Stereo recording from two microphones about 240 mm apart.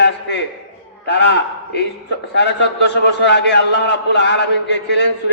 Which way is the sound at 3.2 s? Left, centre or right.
Left.